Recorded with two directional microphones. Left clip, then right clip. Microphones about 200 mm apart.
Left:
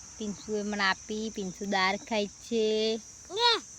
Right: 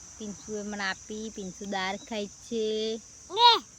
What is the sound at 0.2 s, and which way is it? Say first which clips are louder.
Speech: left 4 dB; 40° left (ahead or behind).